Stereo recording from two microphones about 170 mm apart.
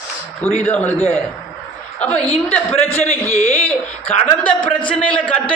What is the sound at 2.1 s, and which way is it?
Speech, 40° left (ahead or behind).